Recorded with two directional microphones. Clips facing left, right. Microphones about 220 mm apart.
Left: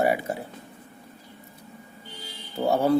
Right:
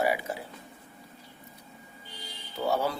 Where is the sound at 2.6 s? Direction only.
55° left (ahead or behind).